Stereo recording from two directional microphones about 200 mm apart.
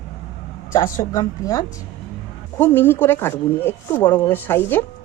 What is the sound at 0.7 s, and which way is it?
Speech, 20° left (ahead or behind).